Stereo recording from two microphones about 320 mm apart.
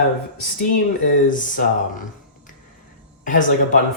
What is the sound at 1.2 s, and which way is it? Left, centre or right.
Speech, left.